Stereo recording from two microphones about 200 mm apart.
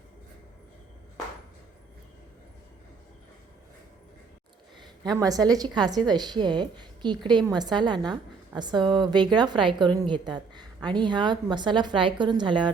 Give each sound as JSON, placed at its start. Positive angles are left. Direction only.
{"t": 5.1, "sound": "a woman's voice", "side_deg": -20}